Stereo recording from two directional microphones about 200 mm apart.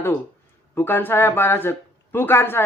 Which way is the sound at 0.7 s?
10° left (ahead or behind).